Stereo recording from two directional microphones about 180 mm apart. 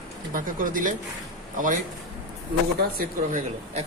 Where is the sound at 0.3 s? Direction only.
50° right (ahead or behind).